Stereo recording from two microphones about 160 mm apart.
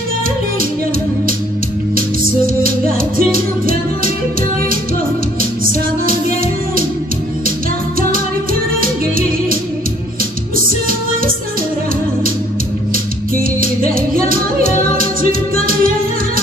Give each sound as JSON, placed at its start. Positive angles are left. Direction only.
{"t": 3.2, "sound": "music", "side_deg": -65}
{"t": 8.8, "sound": "music", "side_deg": -65}
{"t": 13.4, "sound": "music", "side_deg": -60}